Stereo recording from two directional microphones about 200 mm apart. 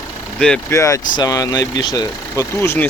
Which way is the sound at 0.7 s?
15° left (ahead or behind).